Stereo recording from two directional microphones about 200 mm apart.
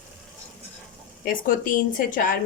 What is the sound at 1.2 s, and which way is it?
Speech, 45° left (ahead or behind).